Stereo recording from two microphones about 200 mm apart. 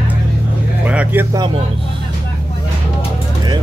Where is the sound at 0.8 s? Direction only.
5° right (ahead or behind).